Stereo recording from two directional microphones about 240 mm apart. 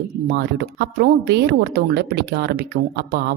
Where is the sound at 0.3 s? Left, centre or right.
Right.